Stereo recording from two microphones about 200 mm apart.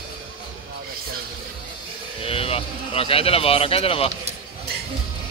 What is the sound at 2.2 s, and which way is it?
A man's voice, 30° left (ahead or behind).